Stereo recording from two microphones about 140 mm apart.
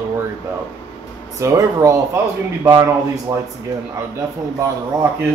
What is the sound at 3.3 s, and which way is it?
Speech, 25° right (ahead or behind).